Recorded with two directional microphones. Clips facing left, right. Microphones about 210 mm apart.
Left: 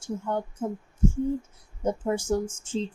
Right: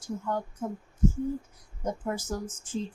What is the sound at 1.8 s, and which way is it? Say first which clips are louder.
Speech: left 6 dB; 30° left (ahead or behind).